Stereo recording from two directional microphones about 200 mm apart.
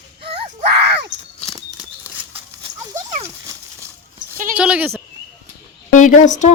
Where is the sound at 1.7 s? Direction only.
15° left (ahead or behind).